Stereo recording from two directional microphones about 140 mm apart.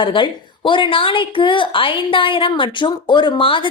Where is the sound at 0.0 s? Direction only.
35° left (ahead or behind).